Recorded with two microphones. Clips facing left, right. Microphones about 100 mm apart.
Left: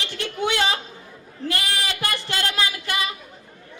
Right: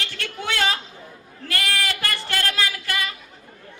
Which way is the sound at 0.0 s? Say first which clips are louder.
Left 4 dB; 20° left (ahead or behind).